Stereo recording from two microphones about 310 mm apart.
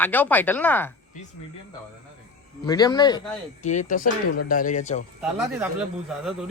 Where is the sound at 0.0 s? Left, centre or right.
Centre.